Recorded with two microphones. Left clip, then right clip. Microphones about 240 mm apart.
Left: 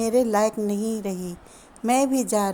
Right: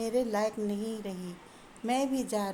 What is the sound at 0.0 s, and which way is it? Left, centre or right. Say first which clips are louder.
A woman's voice: left 9 dB; left.